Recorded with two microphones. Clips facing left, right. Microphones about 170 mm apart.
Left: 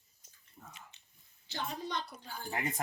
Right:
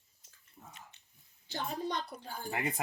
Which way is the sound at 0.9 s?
60° right (ahead or behind).